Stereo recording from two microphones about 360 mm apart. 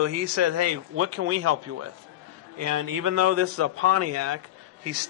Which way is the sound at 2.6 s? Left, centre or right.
Right.